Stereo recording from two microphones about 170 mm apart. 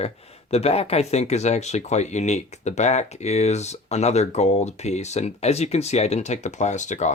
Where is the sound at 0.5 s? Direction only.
35° left (ahead or behind).